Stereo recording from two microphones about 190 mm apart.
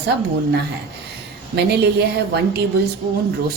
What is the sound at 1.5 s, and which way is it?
Speech, 60° right (ahead or behind).